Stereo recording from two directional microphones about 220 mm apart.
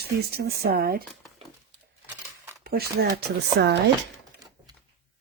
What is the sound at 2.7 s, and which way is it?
Speech, 45° right (ahead or behind).